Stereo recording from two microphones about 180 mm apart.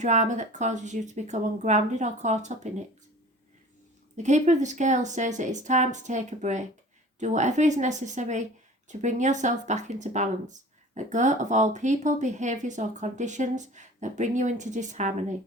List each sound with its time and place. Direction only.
0.0 s speech: 40° right (ahead or behind)
4.2 s speech: 40° right (ahead or behind)